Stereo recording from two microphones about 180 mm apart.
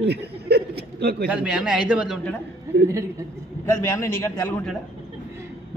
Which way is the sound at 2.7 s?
70° right (ahead or behind).